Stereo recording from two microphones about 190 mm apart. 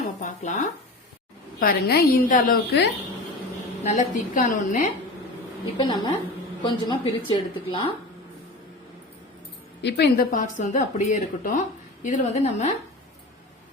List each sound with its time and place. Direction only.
0.2 s a woman's voice: 40° left (ahead or behind)
1.5 s a woman's voice: 50° left (ahead or behind)
3.8 s a woman's voice: 40° left (ahead or behind)
5.7 s a woman's voice: 25° left (ahead or behind)
9.8 s a woman's voice: 55° left (ahead or behind); by 12.7 s 35° left (ahead or behind)